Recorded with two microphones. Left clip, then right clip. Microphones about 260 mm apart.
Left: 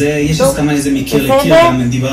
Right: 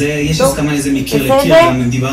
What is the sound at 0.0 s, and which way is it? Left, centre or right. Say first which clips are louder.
A man's voice: left 1 dB; centre.